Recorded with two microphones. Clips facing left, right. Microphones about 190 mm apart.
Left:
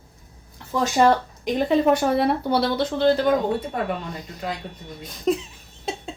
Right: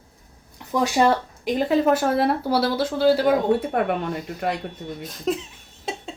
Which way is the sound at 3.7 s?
60° right (ahead or behind).